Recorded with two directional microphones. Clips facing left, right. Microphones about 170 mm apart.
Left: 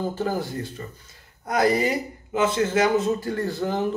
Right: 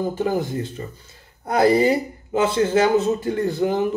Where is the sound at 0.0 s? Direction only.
15° right (ahead or behind).